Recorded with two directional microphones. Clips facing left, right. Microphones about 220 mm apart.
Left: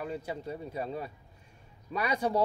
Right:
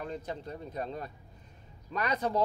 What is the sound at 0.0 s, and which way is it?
Speech, 10° left (ahead or behind).